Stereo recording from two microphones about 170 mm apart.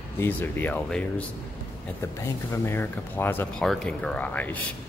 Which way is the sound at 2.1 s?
20° left (ahead or behind).